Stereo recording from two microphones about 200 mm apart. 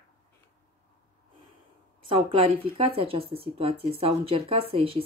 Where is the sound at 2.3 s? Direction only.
25° right (ahead or behind).